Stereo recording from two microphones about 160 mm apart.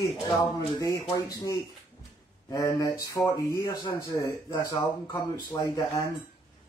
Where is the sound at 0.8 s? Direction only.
20° left (ahead or behind).